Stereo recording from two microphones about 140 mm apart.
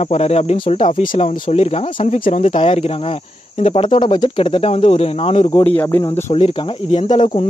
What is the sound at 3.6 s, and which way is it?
Speech, 45° left (ahead or behind).